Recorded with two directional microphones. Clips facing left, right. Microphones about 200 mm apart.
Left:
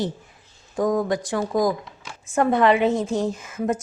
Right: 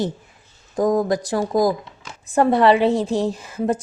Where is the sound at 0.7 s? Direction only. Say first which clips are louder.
Right 3 dB; 40° right (ahead or behind).